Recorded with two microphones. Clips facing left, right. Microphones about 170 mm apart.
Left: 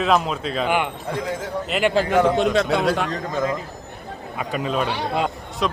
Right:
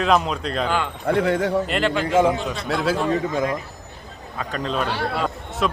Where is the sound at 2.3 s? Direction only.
70° left (ahead or behind).